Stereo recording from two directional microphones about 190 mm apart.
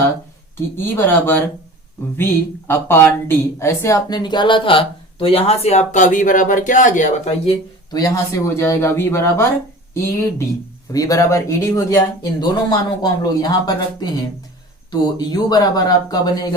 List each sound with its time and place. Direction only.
0.9 s speech: 10° left (ahead or behind); by 7.5 s 35° left (ahead or behind)
7.9 s speech: 20° left (ahead or behind)